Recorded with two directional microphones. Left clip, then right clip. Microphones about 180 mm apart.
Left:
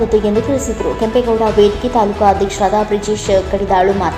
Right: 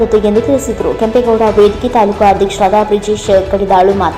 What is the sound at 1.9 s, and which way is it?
Speech, 30° right (ahead or behind).